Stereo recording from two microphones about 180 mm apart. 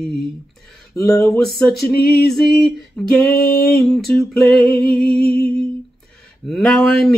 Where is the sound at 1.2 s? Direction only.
Centre (ahead or behind).